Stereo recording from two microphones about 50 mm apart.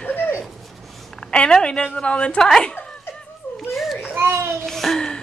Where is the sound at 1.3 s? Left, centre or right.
Centre.